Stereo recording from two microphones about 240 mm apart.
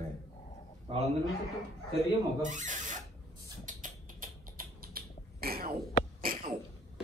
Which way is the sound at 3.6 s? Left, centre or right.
Right.